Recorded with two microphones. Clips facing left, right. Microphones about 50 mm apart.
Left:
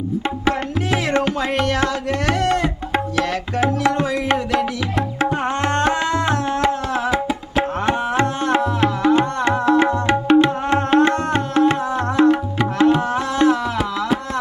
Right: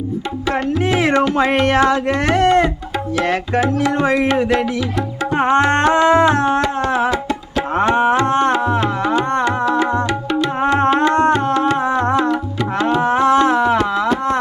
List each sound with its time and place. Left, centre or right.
1.4 s music: right
4.0 s music: right
5.3 s music: right
8.3 s music: right
9.6 s music: left
11.1 s music: right
13.0 s music: right
13.5 s a sound: right